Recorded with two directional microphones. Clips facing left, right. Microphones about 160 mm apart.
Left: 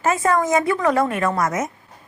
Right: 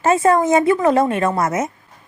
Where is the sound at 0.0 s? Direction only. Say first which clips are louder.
Right 4 dB; 30° right (ahead or behind).